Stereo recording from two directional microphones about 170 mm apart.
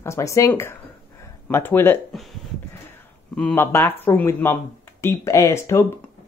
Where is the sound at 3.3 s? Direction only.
10° left (ahead or behind).